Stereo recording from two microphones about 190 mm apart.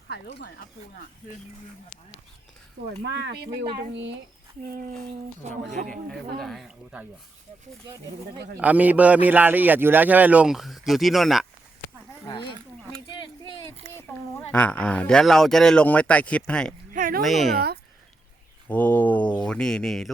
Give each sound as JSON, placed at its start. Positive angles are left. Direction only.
{"t": 0.1, "sound": "speech", "side_deg": 60}
{"t": 3.0, "sound": "speech", "side_deg": -65}
{"t": 3.9, "sound": "speech", "side_deg": -70}
{"t": 5.7, "sound": "speech", "side_deg": -45}
{"t": 6.1, "sound": "speech", "side_deg": 0}
{"t": 8.5, "sound": "a man's voice", "side_deg": -10}
{"t": 12.3, "sound": "speech", "side_deg": 25}
{"t": 13.1, "sound": "a sound", "side_deg": 25}
{"t": 14.1, "sound": "speech", "side_deg": 10}
{"t": 16.9, "sound": "a sound", "side_deg": -45}
{"t": 17.2, "sound": "speech", "side_deg": 0}
{"t": 18.7, "sound": "speech", "side_deg": 10}